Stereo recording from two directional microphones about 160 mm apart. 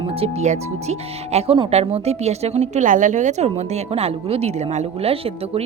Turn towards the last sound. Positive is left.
turn(degrees=-40)  # may be behind; listen again after turning